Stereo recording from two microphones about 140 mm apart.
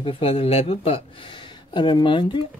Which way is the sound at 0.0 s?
40° left (ahead or behind).